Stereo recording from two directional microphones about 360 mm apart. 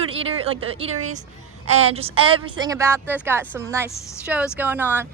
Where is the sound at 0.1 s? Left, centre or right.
Centre.